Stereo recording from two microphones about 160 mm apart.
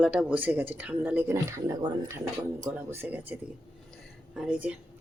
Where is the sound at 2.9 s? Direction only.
10° right (ahead or behind).